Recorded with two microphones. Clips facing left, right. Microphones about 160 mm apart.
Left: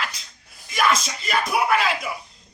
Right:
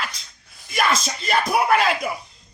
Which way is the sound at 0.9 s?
35° right (ahead or behind).